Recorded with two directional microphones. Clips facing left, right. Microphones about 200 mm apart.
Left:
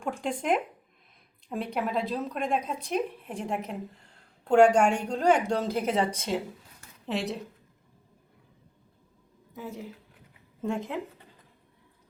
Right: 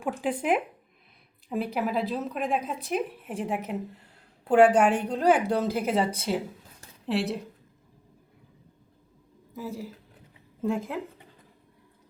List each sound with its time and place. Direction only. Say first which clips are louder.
0.2 s a woman's voice: right 1 dB; 5° right (ahead or behind)
9.6 s a woman's voice: right 3 dB; centre (ahead or behind)